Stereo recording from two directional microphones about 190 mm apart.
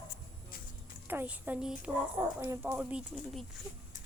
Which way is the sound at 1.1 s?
10° right (ahead or behind).